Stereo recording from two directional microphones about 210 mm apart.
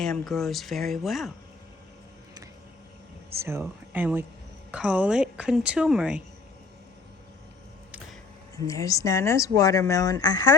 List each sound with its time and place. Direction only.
0.0 s speech: centre (ahead or behind)
3.4 s speech: 10° right (ahead or behind)
8.5 s speech: 15° left (ahead or behind)